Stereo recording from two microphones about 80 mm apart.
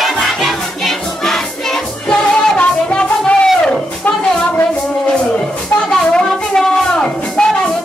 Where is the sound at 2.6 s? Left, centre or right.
Centre.